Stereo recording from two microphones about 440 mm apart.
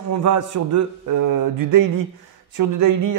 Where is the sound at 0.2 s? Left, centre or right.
Right.